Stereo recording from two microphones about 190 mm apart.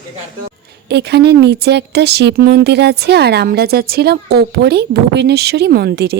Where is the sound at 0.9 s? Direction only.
60° right (ahead or behind).